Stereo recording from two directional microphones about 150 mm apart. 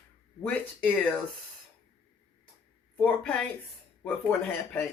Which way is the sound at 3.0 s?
10° left (ahead or behind).